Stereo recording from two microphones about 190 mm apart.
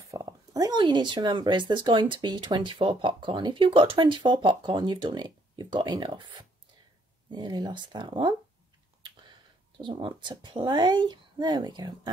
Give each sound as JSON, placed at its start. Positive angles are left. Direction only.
{"t": 0.1, "sound": "speech", "side_deg": -20}
{"t": 7.2, "sound": "speech", "side_deg": -20}
{"t": 9.8, "sound": "speech", "side_deg": -25}